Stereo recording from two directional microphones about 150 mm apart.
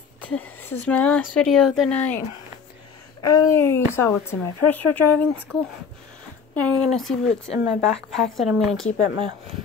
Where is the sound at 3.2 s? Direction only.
25° left (ahead or behind).